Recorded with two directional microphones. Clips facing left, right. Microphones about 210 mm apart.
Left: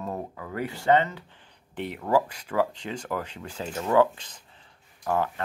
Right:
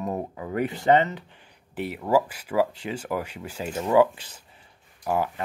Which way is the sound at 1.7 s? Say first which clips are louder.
Right 2 dB; 5° right (ahead or behind).